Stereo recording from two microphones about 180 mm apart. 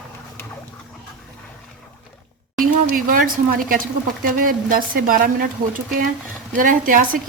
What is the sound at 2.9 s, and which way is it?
Speech, 50° right (ahead or behind).